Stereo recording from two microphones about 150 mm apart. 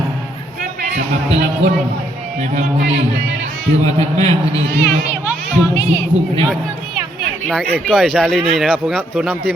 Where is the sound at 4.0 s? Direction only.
45° right (ahead or behind).